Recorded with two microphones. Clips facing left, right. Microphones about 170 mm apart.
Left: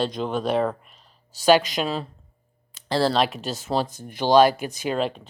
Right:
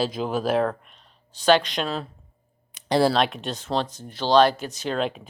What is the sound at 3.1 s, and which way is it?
Speech, centre (ahead or behind).